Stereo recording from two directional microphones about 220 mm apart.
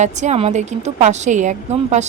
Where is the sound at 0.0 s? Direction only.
30° right (ahead or behind).